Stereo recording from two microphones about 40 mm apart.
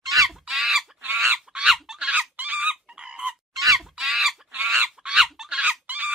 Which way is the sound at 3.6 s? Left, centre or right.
Centre.